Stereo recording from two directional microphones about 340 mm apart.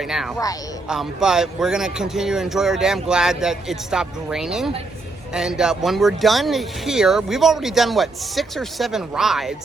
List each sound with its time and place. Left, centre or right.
0.0 s speech: centre